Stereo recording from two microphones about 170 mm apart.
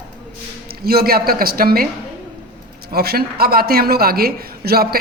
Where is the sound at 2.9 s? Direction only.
65° right (ahead or behind).